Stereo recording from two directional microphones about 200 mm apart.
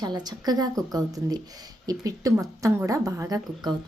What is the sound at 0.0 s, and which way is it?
Speech, 20° right (ahead or behind).